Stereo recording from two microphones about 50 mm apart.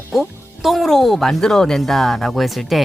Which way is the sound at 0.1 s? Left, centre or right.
Centre.